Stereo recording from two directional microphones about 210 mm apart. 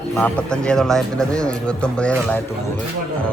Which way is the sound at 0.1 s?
5° left (ahead or behind).